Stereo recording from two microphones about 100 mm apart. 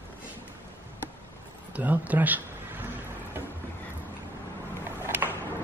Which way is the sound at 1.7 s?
15° right (ahead or behind).